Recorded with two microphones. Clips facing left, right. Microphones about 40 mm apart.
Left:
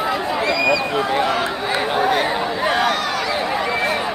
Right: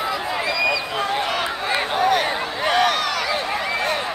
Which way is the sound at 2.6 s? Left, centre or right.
Right.